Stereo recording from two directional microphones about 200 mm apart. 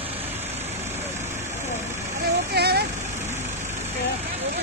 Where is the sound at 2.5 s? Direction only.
55° right (ahead or behind).